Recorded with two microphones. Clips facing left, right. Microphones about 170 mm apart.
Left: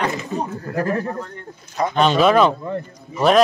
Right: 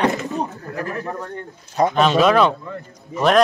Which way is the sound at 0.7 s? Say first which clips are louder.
Left 7 dB; 40° left (ahead or behind).